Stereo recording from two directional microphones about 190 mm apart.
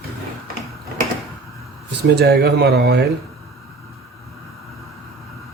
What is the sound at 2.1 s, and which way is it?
Speech, 55° right (ahead or behind).